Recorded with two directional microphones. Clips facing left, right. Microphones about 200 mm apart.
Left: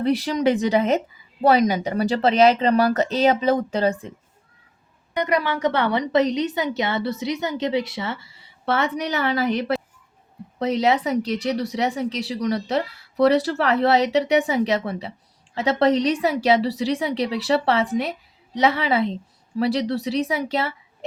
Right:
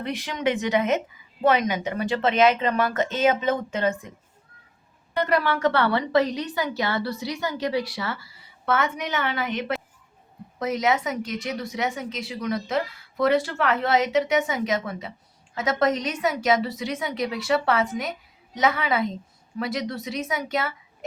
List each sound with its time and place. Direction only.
0.0 s speech: 35° left (ahead or behind)
5.1 s a woman's voice: 15° left (ahead or behind)